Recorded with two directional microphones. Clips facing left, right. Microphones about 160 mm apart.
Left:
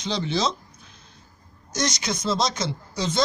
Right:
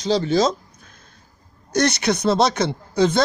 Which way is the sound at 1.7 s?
60° right (ahead or behind).